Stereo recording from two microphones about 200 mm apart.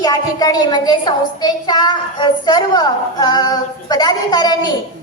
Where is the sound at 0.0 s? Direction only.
20° left (ahead or behind).